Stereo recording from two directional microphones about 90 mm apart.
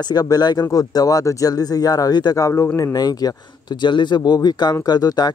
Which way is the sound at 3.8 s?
60° left (ahead or behind).